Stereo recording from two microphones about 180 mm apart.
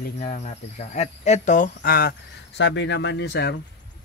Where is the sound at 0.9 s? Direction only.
40° left (ahead or behind).